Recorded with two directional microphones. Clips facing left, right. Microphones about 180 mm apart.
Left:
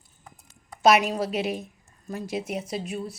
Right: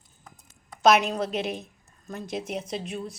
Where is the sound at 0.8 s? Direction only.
5° left (ahead or behind).